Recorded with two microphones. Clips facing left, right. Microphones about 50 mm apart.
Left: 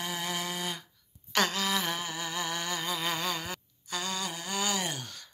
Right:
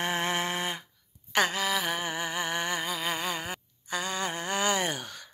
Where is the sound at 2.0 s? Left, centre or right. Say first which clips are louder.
Right 3 dB; right.